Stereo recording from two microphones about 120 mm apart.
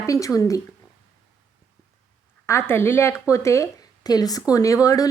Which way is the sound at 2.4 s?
20° left (ahead or behind).